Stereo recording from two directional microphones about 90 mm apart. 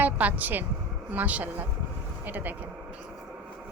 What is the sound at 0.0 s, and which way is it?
A woman's voice, 20° right (ahead or behind).